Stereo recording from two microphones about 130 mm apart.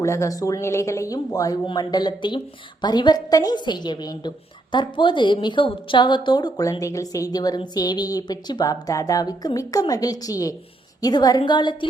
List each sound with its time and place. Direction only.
0.0 s a woman's voice: 25° left (ahead or behind)